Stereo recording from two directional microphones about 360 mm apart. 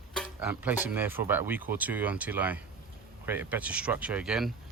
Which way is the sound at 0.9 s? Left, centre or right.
Centre.